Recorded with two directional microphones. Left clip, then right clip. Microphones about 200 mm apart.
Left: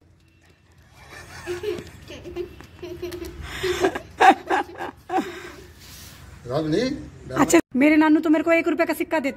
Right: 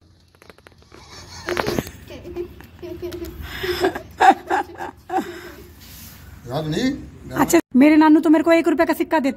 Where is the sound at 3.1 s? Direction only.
10° left (ahead or behind).